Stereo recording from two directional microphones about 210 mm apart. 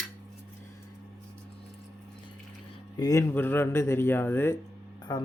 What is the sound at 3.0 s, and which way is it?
Speech, 15° left (ahead or behind).